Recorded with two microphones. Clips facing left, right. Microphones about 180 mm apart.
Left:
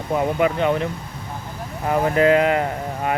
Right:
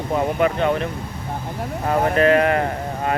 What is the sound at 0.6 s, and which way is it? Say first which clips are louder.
Speech: even; 15° left (ahead or behind).